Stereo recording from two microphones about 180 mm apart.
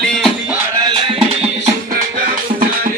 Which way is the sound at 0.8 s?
25° right (ahead or behind).